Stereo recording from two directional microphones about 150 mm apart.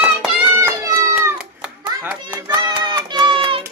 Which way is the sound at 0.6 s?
20° right (ahead or behind).